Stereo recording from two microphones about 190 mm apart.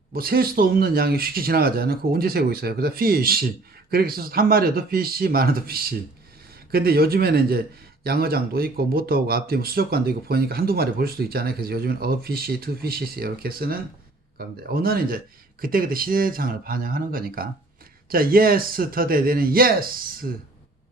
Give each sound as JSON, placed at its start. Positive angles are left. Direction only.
{"t": 0.1, "sound": "speech", "side_deg": -50}